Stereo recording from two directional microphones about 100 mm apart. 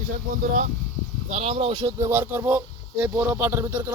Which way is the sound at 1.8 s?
40° right (ahead or behind).